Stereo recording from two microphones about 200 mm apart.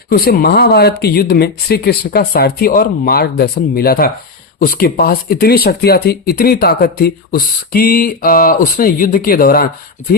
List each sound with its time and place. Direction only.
0.1 s speech: 50° left (ahead or behind)